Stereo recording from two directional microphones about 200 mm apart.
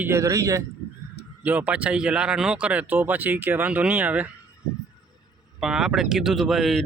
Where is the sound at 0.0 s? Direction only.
15° right (ahead or behind).